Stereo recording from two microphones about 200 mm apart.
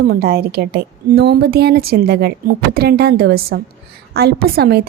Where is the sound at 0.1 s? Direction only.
50° right (ahead or behind).